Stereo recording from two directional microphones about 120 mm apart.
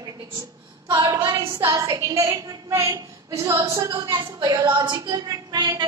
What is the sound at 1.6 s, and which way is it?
A woman's voice, 30° right (ahead or behind).